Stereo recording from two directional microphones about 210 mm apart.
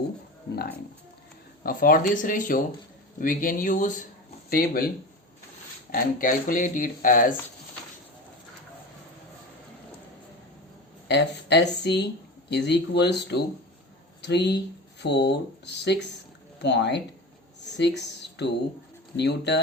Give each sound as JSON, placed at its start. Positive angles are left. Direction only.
{"t": 1.6, "sound": "speech", "side_deg": 45}
{"t": 5.9, "sound": "speech", "side_deg": 40}
{"t": 11.1, "sound": "speech", "side_deg": 55}